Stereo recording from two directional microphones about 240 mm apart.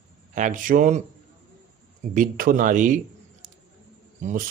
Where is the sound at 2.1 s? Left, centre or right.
Right.